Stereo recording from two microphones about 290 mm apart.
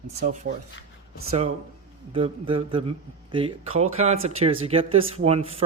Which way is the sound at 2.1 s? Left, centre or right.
Centre.